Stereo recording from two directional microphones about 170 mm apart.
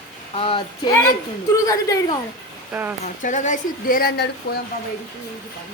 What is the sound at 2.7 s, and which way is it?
Speech, 10° right (ahead or behind).